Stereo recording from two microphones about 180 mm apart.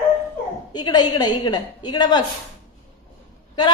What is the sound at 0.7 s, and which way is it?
A woman's voice, 25° left (ahead or behind).